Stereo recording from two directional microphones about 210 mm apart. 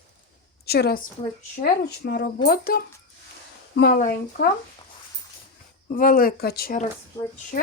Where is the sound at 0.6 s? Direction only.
50° left (ahead or behind).